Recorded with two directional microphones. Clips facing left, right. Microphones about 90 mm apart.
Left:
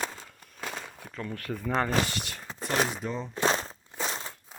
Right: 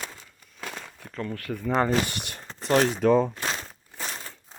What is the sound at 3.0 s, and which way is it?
Speech, 65° right (ahead or behind).